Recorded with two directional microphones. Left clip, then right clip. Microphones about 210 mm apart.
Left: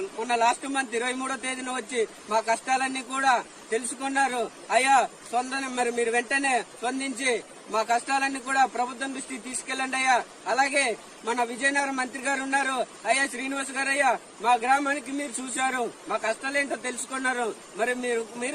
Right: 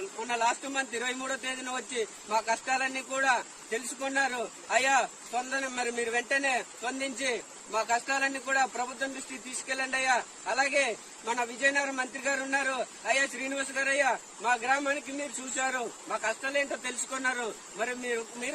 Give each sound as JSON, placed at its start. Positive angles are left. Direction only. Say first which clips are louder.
{"t": 0.3, "sound": "a man's voice", "louder": "left 5 dB", "side_deg": -15}